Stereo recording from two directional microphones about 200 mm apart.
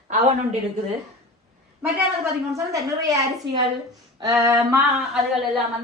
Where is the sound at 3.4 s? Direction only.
60° right (ahead or behind).